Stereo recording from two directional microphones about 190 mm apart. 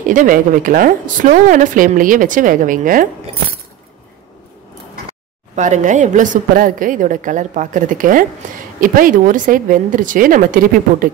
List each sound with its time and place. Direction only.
0.1 s a woman's voice: 45° right (ahead or behind)
5.6 s a woman's voice: 40° right (ahead or behind)